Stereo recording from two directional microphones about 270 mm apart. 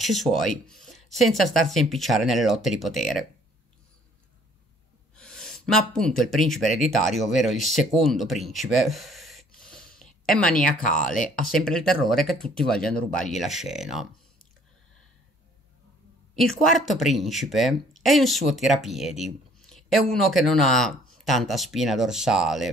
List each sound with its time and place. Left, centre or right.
0.0 s speech: centre
5.1 s speech: centre
10.6 s speech: left
11.5 s speech: centre
16.3 s speech: centre